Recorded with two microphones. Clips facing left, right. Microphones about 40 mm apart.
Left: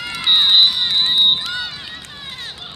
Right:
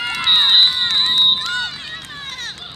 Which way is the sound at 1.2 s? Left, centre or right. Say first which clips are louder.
Even; centre.